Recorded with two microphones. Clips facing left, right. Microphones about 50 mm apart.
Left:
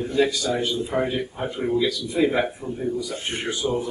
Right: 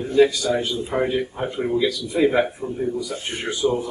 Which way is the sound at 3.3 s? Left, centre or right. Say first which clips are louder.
Even; left.